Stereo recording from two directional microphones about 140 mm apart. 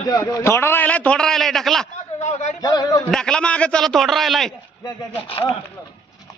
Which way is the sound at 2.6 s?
25° left (ahead or behind).